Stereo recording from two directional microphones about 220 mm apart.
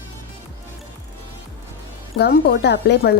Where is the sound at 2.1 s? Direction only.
45° left (ahead or behind).